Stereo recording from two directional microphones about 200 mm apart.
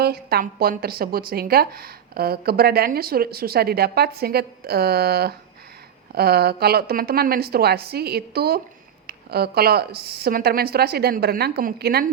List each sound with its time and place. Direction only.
0.0 s a woman's voice: 50° right (ahead or behind)